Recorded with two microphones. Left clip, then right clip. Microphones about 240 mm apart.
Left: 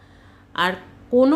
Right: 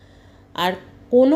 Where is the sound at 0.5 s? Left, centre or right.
Centre.